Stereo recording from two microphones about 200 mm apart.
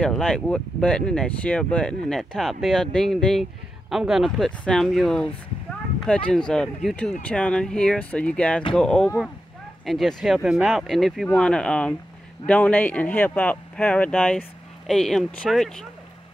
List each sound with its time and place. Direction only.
0.0 s speech: 5° left (ahead or behind)